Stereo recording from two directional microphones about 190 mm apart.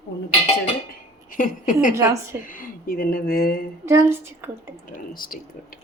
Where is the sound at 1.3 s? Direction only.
45° left (ahead or behind).